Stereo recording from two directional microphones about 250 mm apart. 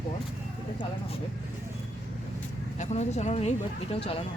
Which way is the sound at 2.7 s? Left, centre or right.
Left.